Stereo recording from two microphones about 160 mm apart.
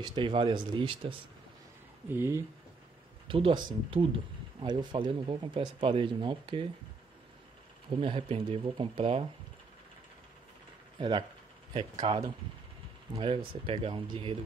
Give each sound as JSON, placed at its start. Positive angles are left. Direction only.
{"t": 0.0, "sound": "speech", "side_deg": -30}
{"t": 2.0, "sound": "speech", "side_deg": -15}
{"t": 3.3, "sound": "speech", "side_deg": -35}
{"t": 8.0, "sound": "speech", "side_deg": -35}
{"t": 11.0, "sound": "speech", "side_deg": -30}